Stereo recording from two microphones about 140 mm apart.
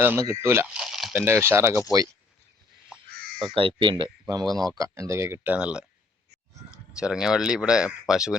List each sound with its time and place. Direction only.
0.0 s speech: 20° right (ahead or behind)
0.7 s a sound: 5° right (ahead or behind)
1.1 s speech: 15° right (ahead or behind)
3.1 s crow: 90° right
3.5 s speech: 40° right (ahead or behind); by 5.8 s 10° right (ahead or behind)
6.9 s speech: 5° right (ahead or behind)